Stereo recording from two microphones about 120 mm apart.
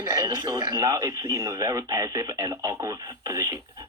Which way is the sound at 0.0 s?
30° right (ahead or behind).